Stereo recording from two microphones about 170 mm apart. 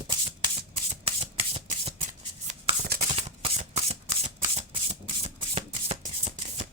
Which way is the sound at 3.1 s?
40° right (ahead or behind).